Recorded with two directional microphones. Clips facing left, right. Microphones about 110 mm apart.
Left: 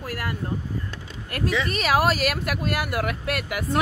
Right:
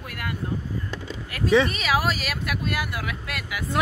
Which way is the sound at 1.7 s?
50° left (ahead or behind).